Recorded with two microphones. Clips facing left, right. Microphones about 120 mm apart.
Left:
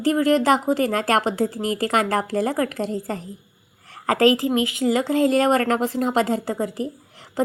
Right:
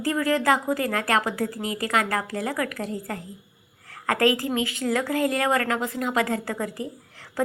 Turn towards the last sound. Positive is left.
turn(degrees=20)  # may be behind; listen again after turning